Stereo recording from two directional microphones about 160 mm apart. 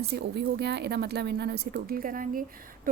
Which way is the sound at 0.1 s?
90° right.